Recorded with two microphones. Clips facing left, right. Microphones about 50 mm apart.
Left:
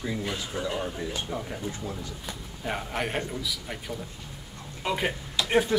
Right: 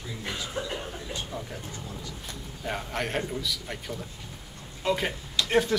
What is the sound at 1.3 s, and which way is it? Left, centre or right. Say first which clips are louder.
Speech: left 3 dB; left.